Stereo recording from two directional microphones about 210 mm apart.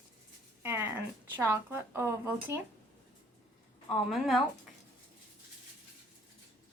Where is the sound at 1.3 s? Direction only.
10° right (ahead or behind).